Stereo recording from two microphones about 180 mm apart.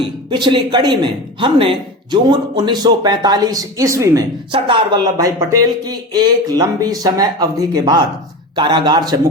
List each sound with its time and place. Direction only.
0.0 s a man's voice: 25° right (ahead or behind)